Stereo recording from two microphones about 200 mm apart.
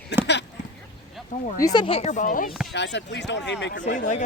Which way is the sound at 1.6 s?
20° left (ahead or behind).